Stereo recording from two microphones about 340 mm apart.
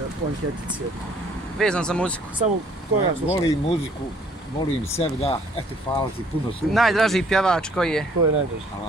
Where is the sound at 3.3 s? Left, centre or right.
Centre.